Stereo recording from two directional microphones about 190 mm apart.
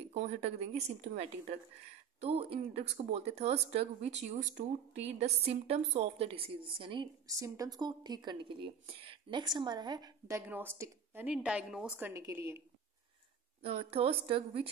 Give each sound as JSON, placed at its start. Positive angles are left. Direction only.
{"t": 0.1, "sound": "a woman's voice", "side_deg": -35}
{"t": 13.6, "sound": "speech", "side_deg": -30}